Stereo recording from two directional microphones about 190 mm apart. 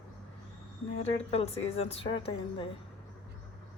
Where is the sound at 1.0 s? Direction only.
35° left (ahead or behind).